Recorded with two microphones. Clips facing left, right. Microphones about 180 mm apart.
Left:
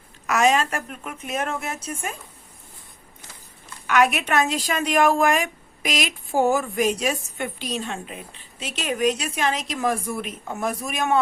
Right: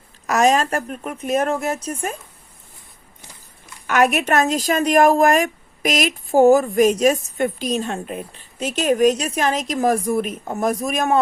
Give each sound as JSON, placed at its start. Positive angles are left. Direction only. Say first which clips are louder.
{"t": 0.3, "sound": "speech", "louder": "right 3 dB", "side_deg": -40}
{"t": 3.8, "sound": "a woman's voice", "louder": "right 3 dB", "side_deg": -45}